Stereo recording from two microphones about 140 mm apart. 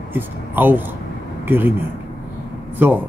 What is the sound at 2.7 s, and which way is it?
Speech, 15° right (ahead or behind).